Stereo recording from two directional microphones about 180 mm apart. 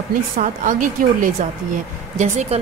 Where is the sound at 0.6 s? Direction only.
45° right (ahead or behind).